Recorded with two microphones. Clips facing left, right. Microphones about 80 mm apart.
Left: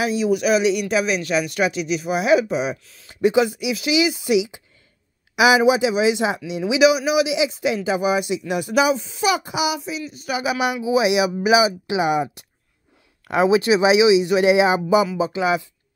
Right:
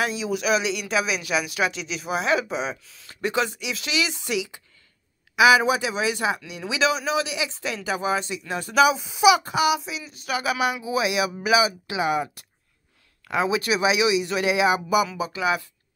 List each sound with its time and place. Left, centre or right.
0.0 s speech: centre
9.4 s speech: centre
13.3 s speech: left